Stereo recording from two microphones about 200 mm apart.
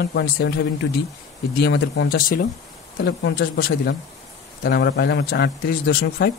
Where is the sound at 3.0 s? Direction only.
60° left (ahead or behind).